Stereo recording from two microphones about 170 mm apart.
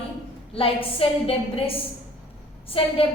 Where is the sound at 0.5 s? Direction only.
35° left (ahead or behind).